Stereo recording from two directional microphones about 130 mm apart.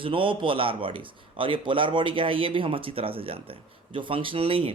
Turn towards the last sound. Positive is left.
turn(degrees=-45)  # may be behind; listen again after turning